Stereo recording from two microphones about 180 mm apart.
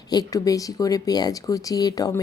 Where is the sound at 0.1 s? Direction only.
20° left (ahead or behind).